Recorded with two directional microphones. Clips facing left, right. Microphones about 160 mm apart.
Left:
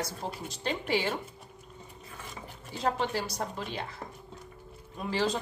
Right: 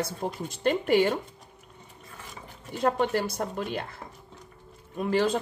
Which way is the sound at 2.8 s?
55° right (ahead or behind).